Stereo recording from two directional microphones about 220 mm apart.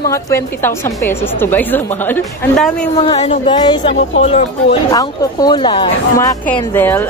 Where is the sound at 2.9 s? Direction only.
20° left (ahead or behind).